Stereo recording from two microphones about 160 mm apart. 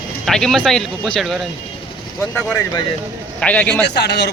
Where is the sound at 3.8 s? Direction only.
90° left.